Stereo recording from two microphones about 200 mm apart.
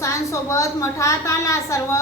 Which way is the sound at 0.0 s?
15° left (ahead or behind).